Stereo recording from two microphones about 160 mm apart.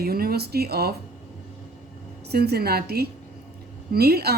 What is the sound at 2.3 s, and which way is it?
A woman's voice, 85° right.